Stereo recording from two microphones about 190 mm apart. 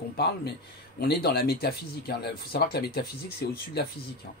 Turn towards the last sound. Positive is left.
turn(degrees=55)  # may be behind; listen again after turning